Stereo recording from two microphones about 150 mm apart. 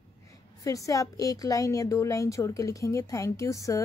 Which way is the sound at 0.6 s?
20° left (ahead or behind).